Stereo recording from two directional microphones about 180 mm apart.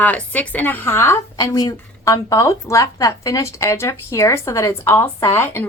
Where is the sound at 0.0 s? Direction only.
10° left (ahead or behind).